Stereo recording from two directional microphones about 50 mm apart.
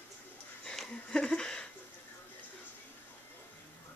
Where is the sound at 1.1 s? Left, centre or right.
Centre.